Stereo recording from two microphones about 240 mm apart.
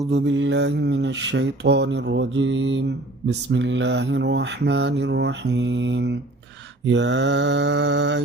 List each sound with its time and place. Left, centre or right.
0.1 s mantra: right